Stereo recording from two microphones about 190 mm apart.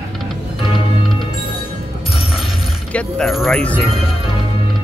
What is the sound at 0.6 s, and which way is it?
Music, 25° left (ahead or behind).